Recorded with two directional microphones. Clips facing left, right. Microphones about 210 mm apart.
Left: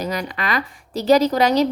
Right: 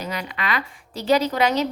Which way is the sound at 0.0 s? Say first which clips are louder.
Left 4 dB; 40° left (ahead or behind).